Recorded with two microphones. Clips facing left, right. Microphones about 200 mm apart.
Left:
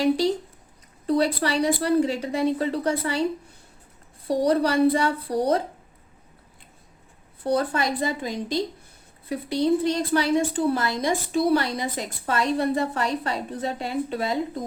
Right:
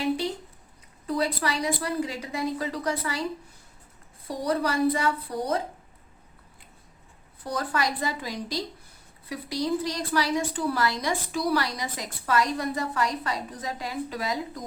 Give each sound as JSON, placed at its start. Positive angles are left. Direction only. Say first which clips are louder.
{"t": 1.0, "sound": "a woman's voice", "louder": "left 5 dB", "side_deg": 35}
{"t": 4.4, "sound": "a woman's voice", "louder": "left 4 dB", "side_deg": 30}
{"t": 7.5, "sound": "a woman's voice", "louder": "left 5 dB", "side_deg": 25}